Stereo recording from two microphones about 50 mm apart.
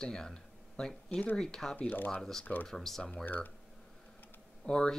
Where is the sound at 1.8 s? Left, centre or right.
Left.